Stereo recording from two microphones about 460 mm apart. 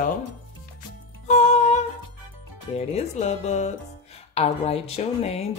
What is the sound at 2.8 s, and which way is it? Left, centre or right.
Speech, centre.